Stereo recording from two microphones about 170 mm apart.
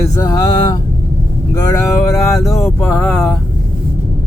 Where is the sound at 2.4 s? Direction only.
15° left (ahead or behind).